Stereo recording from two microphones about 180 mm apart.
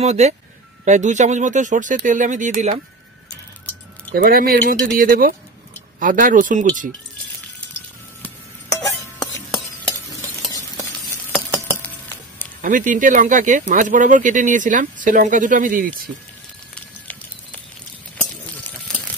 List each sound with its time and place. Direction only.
0.0 s speech: 40° right (ahead or behind)
4.1 s speech: 55° right (ahead or behind)
8.9 s stir: centre (ahead or behind)
11.3 s a sound: 10° left (ahead or behind)
12.6 s speech: 45° right (ahead or behind)